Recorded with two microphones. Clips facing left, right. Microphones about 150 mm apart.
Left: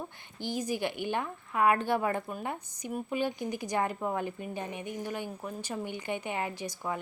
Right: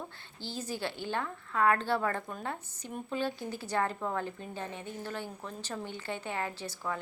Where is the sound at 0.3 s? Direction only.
15° left (ahead or behind).